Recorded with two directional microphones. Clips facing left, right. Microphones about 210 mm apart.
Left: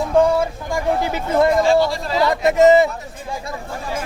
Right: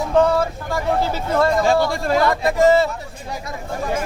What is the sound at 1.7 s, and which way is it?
Speech, 50° right (ahead or behind).